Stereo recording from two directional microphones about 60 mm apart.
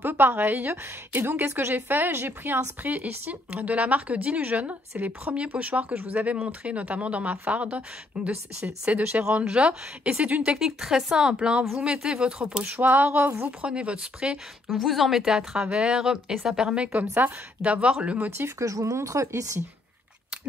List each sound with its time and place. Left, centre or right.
0.0 s a woman's voice: right
10.6 s a woman's voice: centre
14.7 s a woman's voice: centre; by 17.7 s right
17.7 s a woman's voice: centre
18.6 s speech: right